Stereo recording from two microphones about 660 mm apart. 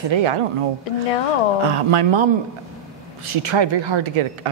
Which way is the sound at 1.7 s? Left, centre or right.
Right.